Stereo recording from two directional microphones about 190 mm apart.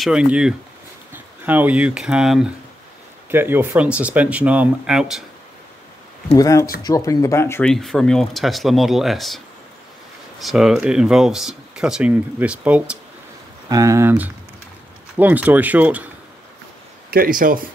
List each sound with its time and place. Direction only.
0.0 s speech: 5° right (ahead or behind)
6.3 s speech: 20° left (ahead or behind)
7.7 s speech: centre (ahead or behind)
10.4 s speech: centre (ahead or behind)
13.7 s speech: 15° right (ahead or behind)
17.1 s speech: 50° right (ahead or behind)